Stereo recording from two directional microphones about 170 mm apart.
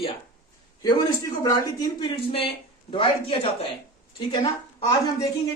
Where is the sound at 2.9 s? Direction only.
35° left (ahead or behind).